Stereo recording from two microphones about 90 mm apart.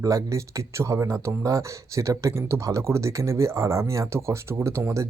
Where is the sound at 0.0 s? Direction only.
40° right (ahead or behind).